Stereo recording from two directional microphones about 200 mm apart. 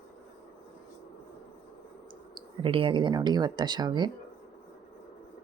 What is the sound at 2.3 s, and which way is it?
Speech, 25° right (ahead or behind).